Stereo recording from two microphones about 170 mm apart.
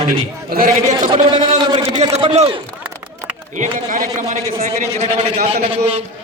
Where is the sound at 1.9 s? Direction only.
35° right (ahead or behind).